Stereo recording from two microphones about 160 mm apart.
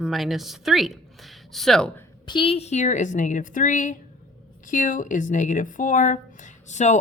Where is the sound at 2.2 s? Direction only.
30° left (ahead or behind).